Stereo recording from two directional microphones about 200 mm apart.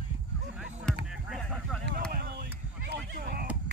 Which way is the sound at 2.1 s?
55° right (ahead or behind).